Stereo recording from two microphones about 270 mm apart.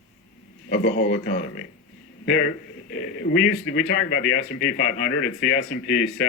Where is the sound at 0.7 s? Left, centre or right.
Left.